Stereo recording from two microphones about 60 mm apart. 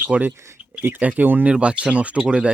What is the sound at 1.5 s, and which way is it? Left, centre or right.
Speech, centre.